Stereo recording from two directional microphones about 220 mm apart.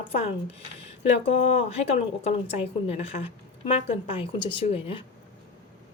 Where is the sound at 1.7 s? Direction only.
30° left (ahead or behind).